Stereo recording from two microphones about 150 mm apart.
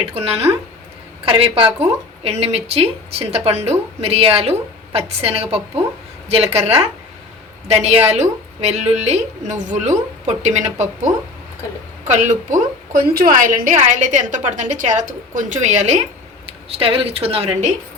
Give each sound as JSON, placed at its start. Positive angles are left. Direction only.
{"t": 0.1, "sound": "a woman's voice", "side_deg": -40}
{"t": 7.7, "sound": "a woman's voice", "side_deg": -45}